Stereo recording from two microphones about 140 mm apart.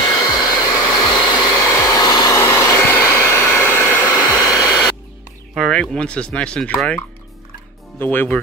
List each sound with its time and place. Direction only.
0.2 s hair dryer: 30° left (ahead or behind)
1.5 s hair dryer: 20° left (ahead or behind)
5.5 s speech: 5° left (ahead or behind)
8.0 s speech: 15° left (ahead or behind)